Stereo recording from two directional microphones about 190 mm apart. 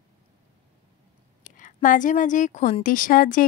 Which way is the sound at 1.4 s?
45° left (ahead or behind).